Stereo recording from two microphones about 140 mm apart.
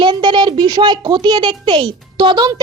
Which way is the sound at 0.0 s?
35° right (ahead or behind).